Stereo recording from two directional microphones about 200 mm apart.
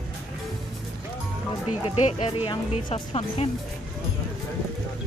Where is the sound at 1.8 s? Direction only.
25° left (ahead or behind).